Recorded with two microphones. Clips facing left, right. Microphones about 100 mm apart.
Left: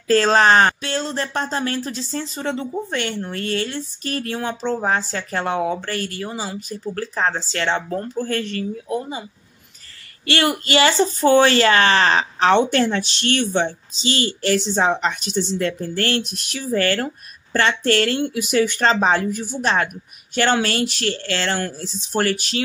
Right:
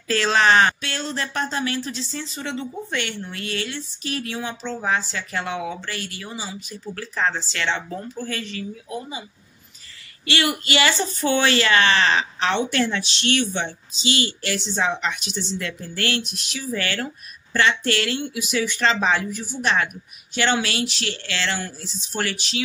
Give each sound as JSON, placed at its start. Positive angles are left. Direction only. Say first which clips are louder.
{"t": 0.1, "sound": "a woman's voice", "louder": "left 4 dB", "side_deg": 40}
{"t": 10.2, "sound": "a woman's voice", "louder": "left 3 dB", "side_deg": 45}